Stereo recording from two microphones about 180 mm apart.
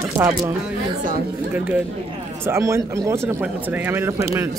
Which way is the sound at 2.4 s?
15° right (ahead or behind).